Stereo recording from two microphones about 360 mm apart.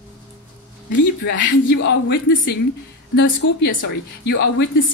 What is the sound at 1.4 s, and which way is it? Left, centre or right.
A woman's voice, left.